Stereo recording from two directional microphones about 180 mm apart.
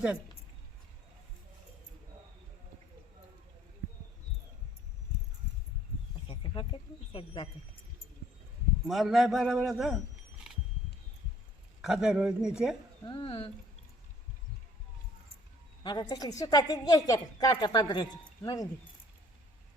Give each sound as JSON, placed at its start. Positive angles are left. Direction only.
{"t": 6.2, "sound": "a sound", "side_deg": 25}
{"t": 7.1, "sound": "a woman's voice", "side_deg": 30}
{"t": 8.9, "sound": "a man's voice", "side_deg": 0}
{"t": 11.8, "sound": "a man's voice", "side_deg": 0}
{"t": 13.1, "sound": "a woman's voice", "side_deg": 30}
{"t": 15.8, "sound": "a woman's voice", "side_deg": 25}